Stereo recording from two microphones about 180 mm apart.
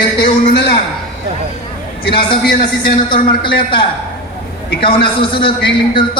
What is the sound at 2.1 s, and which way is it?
A man's voice, 60° left (ahead or behind).